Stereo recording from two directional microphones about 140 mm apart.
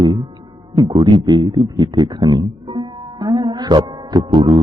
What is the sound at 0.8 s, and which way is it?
A man's voice, 30° right (ahead or behind).